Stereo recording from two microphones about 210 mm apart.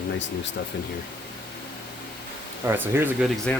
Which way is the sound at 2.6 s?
10° right (ahead or behind).